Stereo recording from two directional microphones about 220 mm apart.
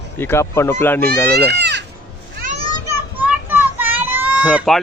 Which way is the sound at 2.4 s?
40° right (ahead or behind).